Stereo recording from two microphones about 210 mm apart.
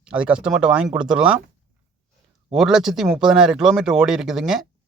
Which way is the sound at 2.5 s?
Centre (ahead or behind).